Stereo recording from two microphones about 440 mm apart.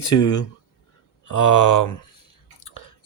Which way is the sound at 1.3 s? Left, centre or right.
Left.